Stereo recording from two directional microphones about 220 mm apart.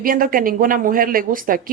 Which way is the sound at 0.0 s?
40° right (ahead or behind).